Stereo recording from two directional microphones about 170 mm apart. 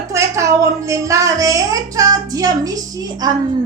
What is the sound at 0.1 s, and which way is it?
A woman's voice, 20° right (ahead or behind).